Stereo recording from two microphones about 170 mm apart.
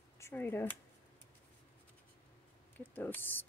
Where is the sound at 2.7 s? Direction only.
10° left (ahead or behind).